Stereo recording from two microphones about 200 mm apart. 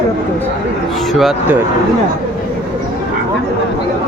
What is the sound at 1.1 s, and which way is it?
Speech, centre (ahead or behind).